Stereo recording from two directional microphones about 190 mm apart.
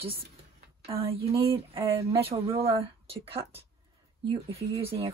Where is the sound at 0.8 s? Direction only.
30° right (ahead or behind).